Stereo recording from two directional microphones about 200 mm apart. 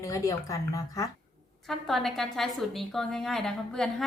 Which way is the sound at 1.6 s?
Centre (ahead or behind).